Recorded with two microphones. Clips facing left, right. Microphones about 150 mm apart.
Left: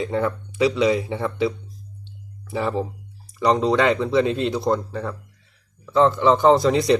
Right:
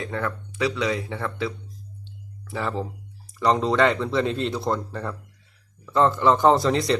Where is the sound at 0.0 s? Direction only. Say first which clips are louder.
Left 6 dB; 20° left (ahead or behind).